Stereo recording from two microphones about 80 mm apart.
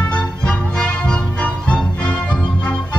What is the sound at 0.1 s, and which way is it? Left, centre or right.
Music, centre.